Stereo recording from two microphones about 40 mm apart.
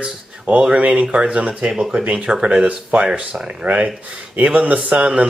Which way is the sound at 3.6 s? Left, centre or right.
Right.